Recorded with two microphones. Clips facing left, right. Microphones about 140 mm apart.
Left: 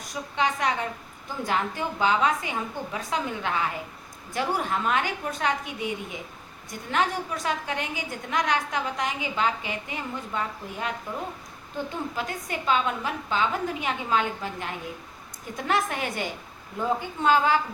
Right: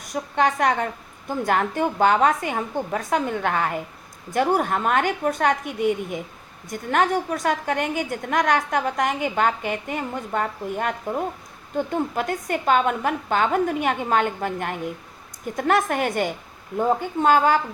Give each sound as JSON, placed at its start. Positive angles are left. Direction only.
{"t": 0.1, "sound": "a woman's voice", "side_deg": -50}